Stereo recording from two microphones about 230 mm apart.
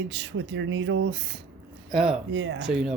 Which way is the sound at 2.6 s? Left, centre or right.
Centre.